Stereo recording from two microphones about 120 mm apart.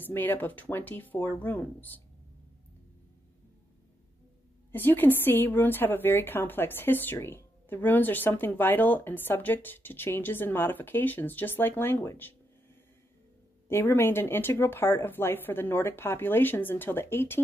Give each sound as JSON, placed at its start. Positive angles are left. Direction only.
{"t": 0.0, "sound": "a woman's voice", "side_deg": 15}
{"t": 4.7, "sound": "a woman's voice", "side_deg": 15}
{"t": 13.7, "sound": "speech", "side_deg": 20}